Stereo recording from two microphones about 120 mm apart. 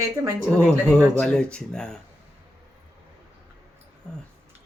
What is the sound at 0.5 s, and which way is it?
Speech, 10° left (ahead or behind).